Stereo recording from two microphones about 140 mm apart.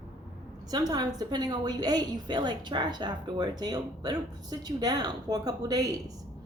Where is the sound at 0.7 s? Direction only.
30° right (ahead or behind).